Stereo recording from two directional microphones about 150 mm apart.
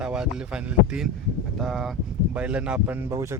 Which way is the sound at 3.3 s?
20° right (ahead or behind).